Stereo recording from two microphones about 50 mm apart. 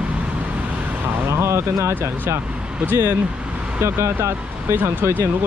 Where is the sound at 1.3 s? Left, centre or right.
Right.